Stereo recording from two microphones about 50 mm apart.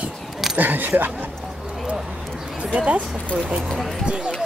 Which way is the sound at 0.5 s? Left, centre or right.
Right.